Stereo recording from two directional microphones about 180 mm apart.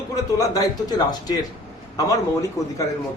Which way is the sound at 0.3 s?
20° left (ahead or behind).